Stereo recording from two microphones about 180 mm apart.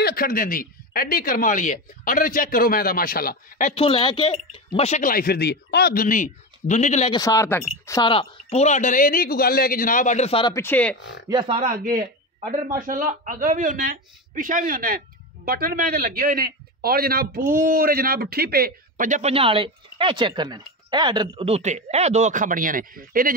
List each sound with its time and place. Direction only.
0.0 s speech: 55° left (ahead or behind)
3.7 s speech: 30° left (ahead or behind)
7.1 s speech: 20° left (ahead or behind)
8.1 s speech: 30° left (ahead or behind)
10.5 s speech: 10° left (ahead or behind)
11.2 s speech: 30° right (ahead or behind)
11.7 s speech: 50° right (ahead or behind)
19.3 s speech: 30° right (ahead or behind); by 23.3 s 50° right (ahead or behind)